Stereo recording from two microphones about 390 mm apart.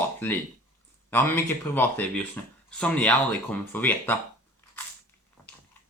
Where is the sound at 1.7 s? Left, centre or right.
Centre.